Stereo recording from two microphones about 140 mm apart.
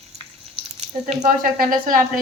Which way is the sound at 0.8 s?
55° right (ahead or behind).